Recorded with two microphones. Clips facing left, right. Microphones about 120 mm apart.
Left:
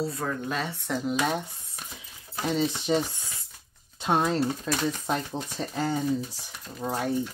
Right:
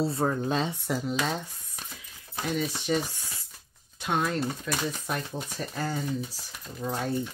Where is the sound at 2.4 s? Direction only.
25° left (ahead or behind).